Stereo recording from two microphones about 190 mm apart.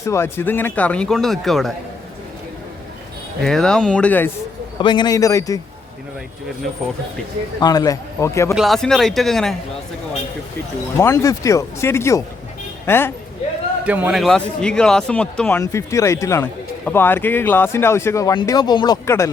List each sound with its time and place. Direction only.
0.0 s speech: 15° left (ahead or behind)
3.4 s a man's voice: 5° left (ahead or behind)
4.8 s a man's voice: 25° left (ahead or behind)
7.6 s a man's voice: 20° left (ahead or behind)
8.5 s a man's voice: centre (ahead or behind)
10.9 s a woman's voice: 15° left (ahead or behind)
13.8 s speech: 10° right (ahead or behind); by 19.3 s 15° left (ahead or behind)